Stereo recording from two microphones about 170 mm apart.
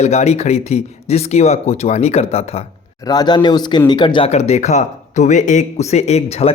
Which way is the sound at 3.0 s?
25° left (ahead or behind).